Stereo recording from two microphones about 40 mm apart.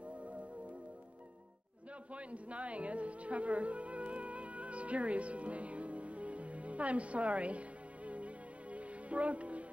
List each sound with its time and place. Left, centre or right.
2.1 s speech: right
8.7 s music: right